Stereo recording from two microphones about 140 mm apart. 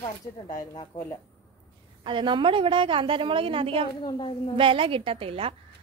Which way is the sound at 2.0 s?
35° right (ahead or behind).